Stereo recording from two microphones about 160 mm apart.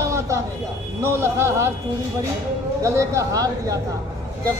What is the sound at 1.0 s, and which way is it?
Speech, 15° right (ahead or behind).